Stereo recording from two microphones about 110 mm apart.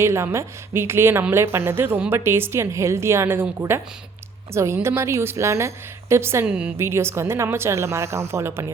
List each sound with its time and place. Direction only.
0.0 s a woman's voice: 25° right (ahead or behind)
6.4 s a woman's voice: 10° right (ahead or behind)
6.7 s a woman's voice: 25° right (ahead or behind)